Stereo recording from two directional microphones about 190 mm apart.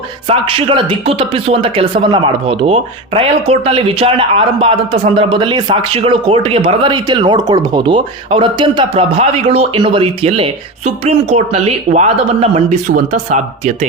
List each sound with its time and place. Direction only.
0.3 s speech: 30° right (ahead or behind)